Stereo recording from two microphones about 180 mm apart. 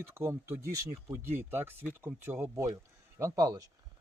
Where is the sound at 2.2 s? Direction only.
10° right (ahead or behind).